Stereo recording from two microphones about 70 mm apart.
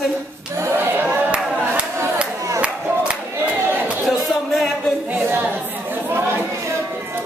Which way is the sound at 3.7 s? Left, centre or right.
Right.